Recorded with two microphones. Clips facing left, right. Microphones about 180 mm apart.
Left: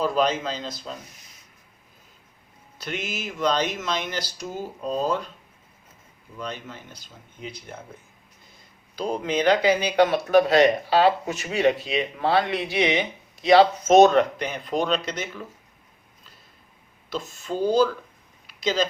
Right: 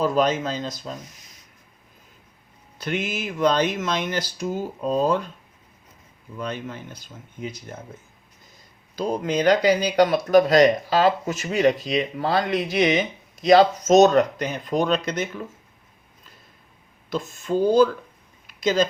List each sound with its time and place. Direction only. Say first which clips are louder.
0.0 s speech: right 2 dB; 45° right (ahead or behind)
2.7 s speech: right 5 dB; 55° right (ahead or behind)
6.4 s speech: right 4 dB; 50° right (ahead or behind)
9.0 s speech: right 2 dB; 40° right (ahead or behind)
17.1 s speech: right 5 dB; 50° right (ahead or behind)
18.4 s a sound: right 3 dB; 50° right (ahead or behind)